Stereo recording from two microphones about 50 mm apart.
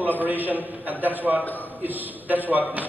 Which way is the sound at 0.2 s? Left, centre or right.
Right.